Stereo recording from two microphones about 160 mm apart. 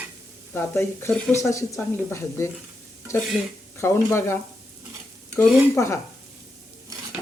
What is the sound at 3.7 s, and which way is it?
Speech, 15° left (ahead or behind).